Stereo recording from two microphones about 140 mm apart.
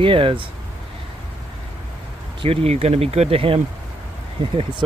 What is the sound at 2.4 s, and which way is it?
Speech, 45° right (ahead or behind).